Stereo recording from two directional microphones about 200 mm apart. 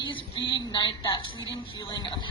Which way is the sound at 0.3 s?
20° left (ahead or behind).